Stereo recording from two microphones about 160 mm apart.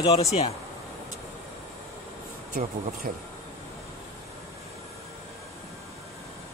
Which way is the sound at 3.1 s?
55° right (ahead or behind).